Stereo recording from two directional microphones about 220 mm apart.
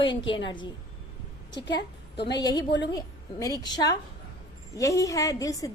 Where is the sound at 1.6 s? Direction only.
50° left (ahead or behind).